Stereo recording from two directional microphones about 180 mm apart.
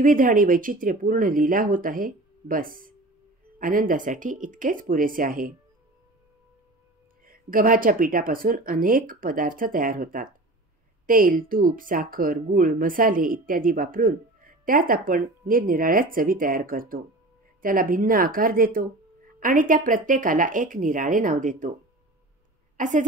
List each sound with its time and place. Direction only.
0.0 s speech: 50° right (ahead or behind)
7.2 s speech: 50° right (ahead or behind)
22.8 s a woman's voice: 45° right (ahead or behind)